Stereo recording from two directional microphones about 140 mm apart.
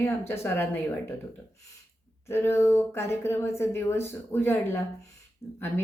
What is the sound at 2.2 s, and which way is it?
Speech, 15° left (ahead or behind).